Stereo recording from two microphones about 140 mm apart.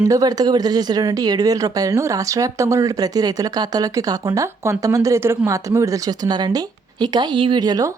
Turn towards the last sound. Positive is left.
turn(degrees=-30)  # may be behind; listen again after turning